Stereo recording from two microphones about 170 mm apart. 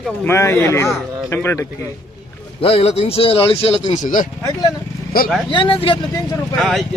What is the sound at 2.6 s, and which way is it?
Speech, 35° left (ahead or behind).